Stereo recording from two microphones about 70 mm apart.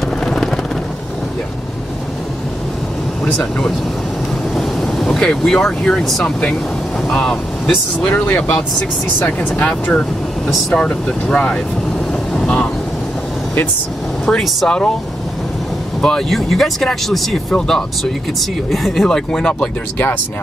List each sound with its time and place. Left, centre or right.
0.2 s vehicle: centre
3.3 s speech: centre
8.1 s speech: left
9.7 s speech: centre
12.4 s vehicle: centre
14.2 s speech: centre
16.0 s speech: centre